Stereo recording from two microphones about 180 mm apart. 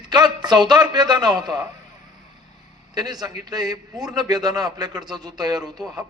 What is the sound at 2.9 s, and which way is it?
A man's voice, 20° right (ahead or behind).